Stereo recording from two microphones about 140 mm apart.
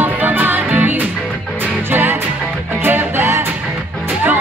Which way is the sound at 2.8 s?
15° right (ahead or behind).